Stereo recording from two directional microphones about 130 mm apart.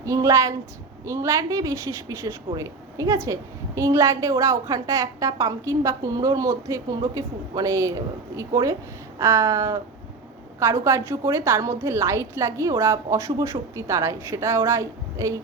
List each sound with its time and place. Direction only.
0.0 s a woman's voice: 25° right (ahead or behind)